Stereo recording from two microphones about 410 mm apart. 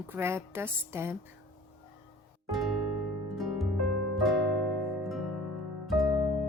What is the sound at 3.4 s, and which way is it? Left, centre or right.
Harp, centre.